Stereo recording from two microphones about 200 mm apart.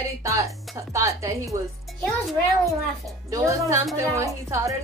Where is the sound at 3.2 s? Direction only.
15° right (ahead or behind).